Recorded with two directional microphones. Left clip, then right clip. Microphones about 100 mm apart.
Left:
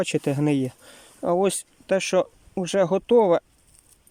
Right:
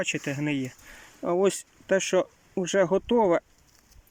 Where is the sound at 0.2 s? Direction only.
40° left (ahead or behind).